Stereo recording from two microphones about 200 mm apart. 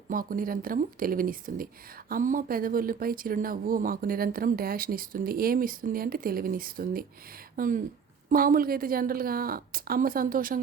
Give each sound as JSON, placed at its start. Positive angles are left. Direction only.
{"t": 0.1, "sound": "speech", "side_deg": -45}